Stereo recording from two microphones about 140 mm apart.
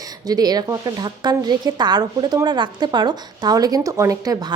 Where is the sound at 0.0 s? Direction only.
30° right (ahead or behind).